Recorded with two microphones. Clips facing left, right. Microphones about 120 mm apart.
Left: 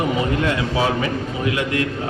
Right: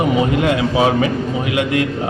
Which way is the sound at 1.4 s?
90° right.